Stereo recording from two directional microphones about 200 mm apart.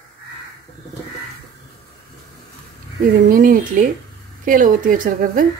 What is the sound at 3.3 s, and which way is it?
A woman's voice, 45° right (ahead or behind).